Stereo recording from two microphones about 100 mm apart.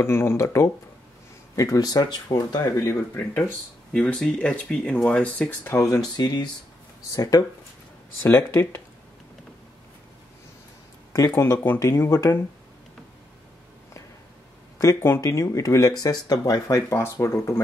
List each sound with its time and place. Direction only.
0.0 s speech: 25° left (ahead or behind)
3.9 s speech: 10° left (ahead or behind)
5.6 s speech: 25° left (ahead or behind)
6.1 s speech: 45° left (ahead or behind)
8.2 s speech: 20° left (ahead or behind)
11.1 s speech: 30° left (ahead or behind)
14.8 s speech: 30° left (ahead or behind)